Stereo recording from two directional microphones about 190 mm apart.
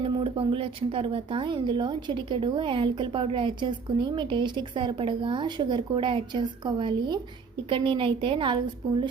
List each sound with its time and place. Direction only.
0.0 s speech: 25° right (ahead or behind)